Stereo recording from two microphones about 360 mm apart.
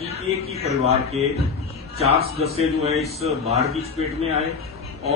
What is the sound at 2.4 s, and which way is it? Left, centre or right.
A man's voice, centre.